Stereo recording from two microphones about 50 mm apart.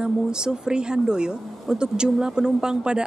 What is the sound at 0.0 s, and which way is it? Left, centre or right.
Speech, centre.